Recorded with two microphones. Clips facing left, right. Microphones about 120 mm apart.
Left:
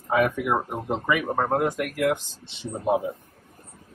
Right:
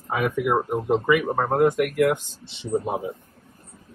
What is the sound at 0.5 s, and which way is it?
Speech, centre (ahead or behind).